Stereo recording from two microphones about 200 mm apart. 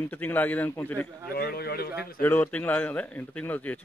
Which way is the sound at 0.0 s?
10° left (ahead or behind).